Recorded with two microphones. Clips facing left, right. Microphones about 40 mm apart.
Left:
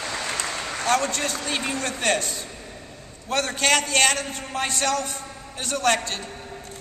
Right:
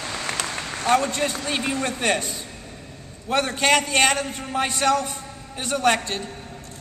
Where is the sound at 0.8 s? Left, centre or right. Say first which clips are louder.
Right 3 dB; centre.